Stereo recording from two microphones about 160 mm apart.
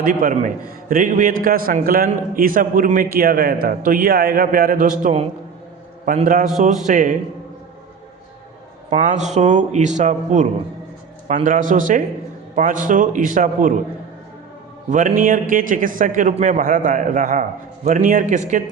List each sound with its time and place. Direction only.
0.0 s a man's voice: 60° right (ahead or behind)
6.2 s a man's voice: 55° right (ahead or behind)
8.9 s a man's voice: 50° right (ahead or behind)
14.8 s mantra: 50° right (ahead or behind)
15.2 s a man's voice: 60° right (ahead or behind)